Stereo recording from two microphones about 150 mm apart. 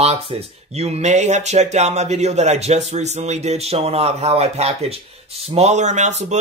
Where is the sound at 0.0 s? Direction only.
45° right (ahead or behind).